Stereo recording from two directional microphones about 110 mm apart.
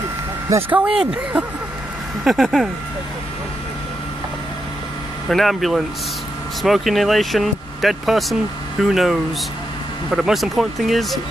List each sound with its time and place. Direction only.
0.5 s speech: 20° right (ahead or behind)
0.7 s speech: 10° right (ahead or behind)
5.3 s speech: centre (ahead or behind)